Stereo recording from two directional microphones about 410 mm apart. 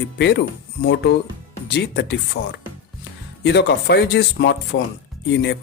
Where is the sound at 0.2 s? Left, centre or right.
Left.